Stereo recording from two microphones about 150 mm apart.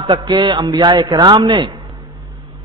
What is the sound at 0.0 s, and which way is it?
A man's voice, 30° right (ahead or behind).